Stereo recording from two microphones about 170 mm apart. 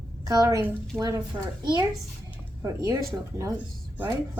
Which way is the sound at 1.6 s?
25° right (ahead or behind).